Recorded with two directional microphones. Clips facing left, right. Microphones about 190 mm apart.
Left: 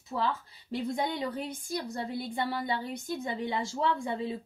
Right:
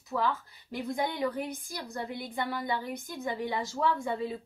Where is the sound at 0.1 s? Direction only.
25° left (ahead or behind).